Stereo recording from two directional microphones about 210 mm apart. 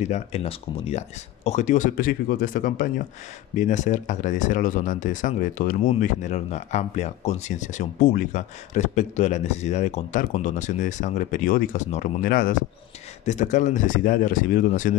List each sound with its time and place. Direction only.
0.0 s speech: 30° left (ahead or behind)